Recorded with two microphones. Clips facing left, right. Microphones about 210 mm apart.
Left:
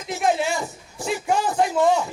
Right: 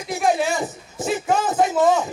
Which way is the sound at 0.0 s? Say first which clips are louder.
Right 2 dB; 15° right (ahead or behind).